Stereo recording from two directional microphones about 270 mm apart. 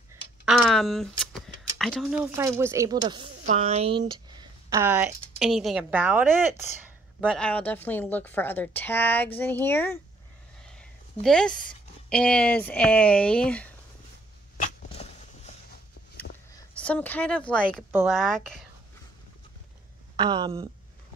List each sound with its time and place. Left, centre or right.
0.5 s a woman's voice: centre
10.6 s a sound: centre
11.2 s speech: centre
14.6 s a sound: left
16.5 s speech: centre
20.2 s speech: centre